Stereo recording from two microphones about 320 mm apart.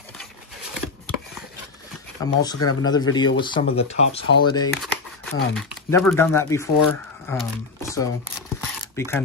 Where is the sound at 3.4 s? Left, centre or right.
Centre.